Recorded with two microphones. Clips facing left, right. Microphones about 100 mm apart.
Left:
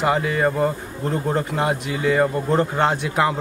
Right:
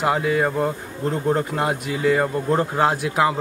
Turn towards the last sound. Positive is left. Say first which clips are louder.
# even
turn(degrees=0)  # may be behind; listen again after turning